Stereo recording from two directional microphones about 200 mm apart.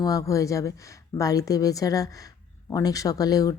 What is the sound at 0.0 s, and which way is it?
Speech, 15° left (ahead or behind).